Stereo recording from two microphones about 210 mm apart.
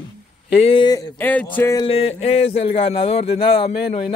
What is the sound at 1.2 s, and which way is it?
Speech, 10° left (ahead or behind).